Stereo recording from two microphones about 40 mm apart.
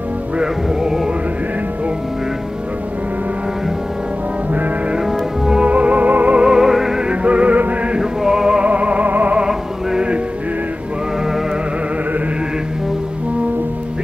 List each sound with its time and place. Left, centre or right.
4.9 s music: centre
5.7 s music: right
6.4 s music: centre
7.1 s music: right
8.0 s music: centre
8.6 s music: right